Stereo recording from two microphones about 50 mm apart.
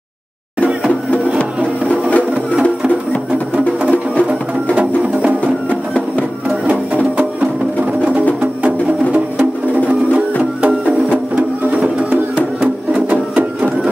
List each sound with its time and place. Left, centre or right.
1.9 s music: left
3.9 s music: left
6.7 s music: right
11.8 s music: right
12.9 s printer: right